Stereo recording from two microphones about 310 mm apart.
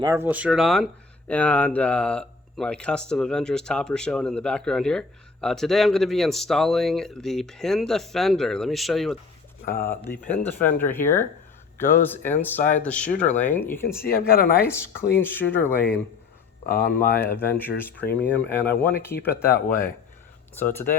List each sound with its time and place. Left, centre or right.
0.0 s speech: centre
10.6 s speech: left
10.9 s speech: centre
13.1 s speech: left
13.4 s speech: centre
14.0 s speech: left
14.7 s speech: centre
16.6 s speech: left
17.2 s speech: centre